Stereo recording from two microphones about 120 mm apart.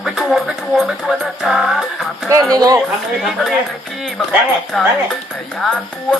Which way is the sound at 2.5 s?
30° right (ahead or behind).